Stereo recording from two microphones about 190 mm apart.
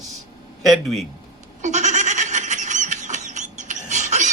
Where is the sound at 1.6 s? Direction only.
40° right (ahead or behind).